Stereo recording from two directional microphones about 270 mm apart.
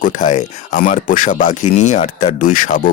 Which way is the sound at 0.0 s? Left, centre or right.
Left.